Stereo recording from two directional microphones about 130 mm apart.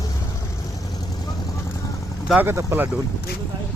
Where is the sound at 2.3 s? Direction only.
15° right (ahead or behind).